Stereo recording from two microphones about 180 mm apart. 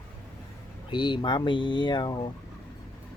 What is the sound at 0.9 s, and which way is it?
Speech, 25° left (ahead or behind).